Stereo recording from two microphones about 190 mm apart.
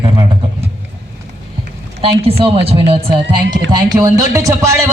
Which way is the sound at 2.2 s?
30° right (ahead or behind).